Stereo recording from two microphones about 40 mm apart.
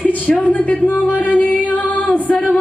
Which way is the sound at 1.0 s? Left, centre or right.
Left.